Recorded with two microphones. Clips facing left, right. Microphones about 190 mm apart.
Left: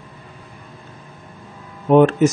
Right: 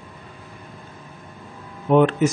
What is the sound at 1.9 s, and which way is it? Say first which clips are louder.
Speech: left 4 dB; 45° left (ahead or behind).